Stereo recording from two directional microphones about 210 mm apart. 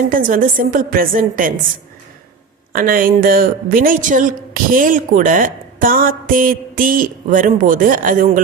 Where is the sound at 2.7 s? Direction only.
40° right (ahead or behind).